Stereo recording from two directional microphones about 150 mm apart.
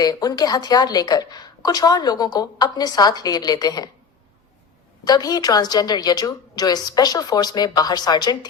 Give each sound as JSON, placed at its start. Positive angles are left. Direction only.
{"t": 0.0, "sound": "a woman's voice", "side_deg": 25}
{"t": 5.0, "sound": "a woman's voice", "side_deg": 25}